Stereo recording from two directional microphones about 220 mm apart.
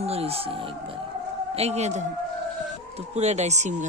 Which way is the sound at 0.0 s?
25° right (ahead or behind).